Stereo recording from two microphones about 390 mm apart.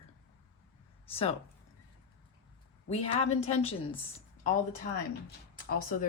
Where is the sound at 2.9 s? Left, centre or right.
Centre.